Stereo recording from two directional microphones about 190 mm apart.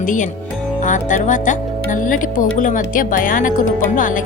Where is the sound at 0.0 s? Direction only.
40° left (ahead or behind).